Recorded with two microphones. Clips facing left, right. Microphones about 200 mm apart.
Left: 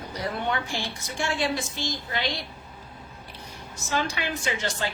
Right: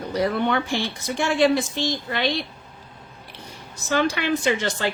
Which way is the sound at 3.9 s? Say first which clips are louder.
Right 7 dB; 60° right (ahead or behind).